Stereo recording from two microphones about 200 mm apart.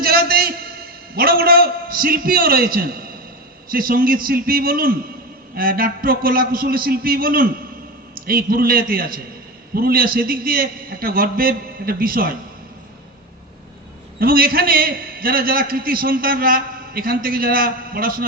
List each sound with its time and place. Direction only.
0.0 s a sound: 50° right (ahead or behind)
3.7 s a man's voice: 45° right (ahead or behind)
14.2 s a man's voice: 50° right (ahead or behind)